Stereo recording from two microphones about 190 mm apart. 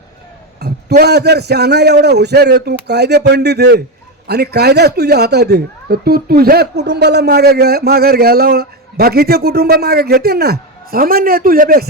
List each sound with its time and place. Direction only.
0.6 s speech: 55° right (ahead or behind)